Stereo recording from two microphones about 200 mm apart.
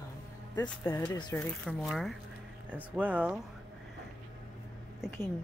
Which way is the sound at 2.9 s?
5° right (ahead or behind).